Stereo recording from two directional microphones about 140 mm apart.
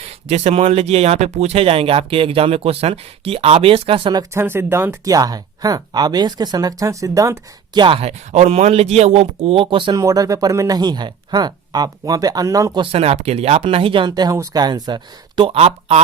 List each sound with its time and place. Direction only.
0.0 s speech: 50° right (ahead or behind)
8.3 s a man's voice: 50° right (ahead or behind)
9.6 s speech: 35° right (ahead or behind)
10.0 s speech: 25° right (ahead or behind)
12.8 s speech: 45° right (ahead or behind)